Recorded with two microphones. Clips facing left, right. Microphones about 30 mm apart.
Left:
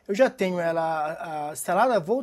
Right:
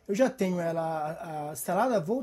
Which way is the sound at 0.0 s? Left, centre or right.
Left.